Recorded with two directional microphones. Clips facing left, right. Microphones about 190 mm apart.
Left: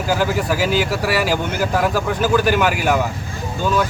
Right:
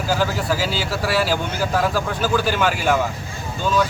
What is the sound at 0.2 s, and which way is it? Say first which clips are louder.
Speech: left 3 dB; 15° left (ahead or behind).